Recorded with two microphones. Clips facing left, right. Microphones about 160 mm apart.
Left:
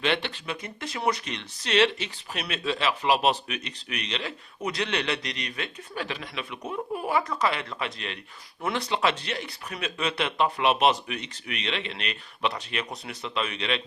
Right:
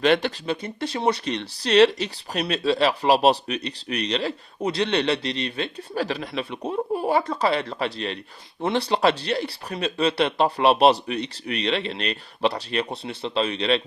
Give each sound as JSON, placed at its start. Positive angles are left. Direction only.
{"t": 0.0, "sound": "speech", "side_deg": -40}